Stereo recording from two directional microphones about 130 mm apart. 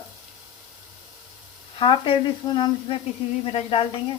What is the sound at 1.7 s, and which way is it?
A woman's voice, 40° left (ahead or behind).